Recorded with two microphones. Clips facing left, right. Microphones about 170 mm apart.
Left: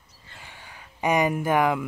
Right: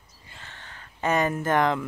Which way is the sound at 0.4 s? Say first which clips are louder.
Even; 10° left (ahead or behind).